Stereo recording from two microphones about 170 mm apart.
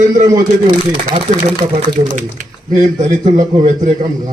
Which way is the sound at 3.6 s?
50° right (ahead or behind).